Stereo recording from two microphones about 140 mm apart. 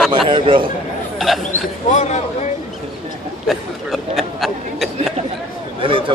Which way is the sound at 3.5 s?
Centre (ahead or behind).